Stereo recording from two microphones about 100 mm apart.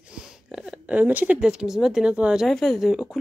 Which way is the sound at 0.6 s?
15° right (ahead or behind).